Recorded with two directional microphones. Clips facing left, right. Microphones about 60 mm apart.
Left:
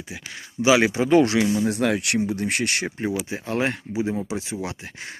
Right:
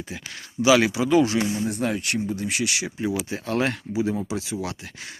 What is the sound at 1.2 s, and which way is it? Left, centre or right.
Speech, left.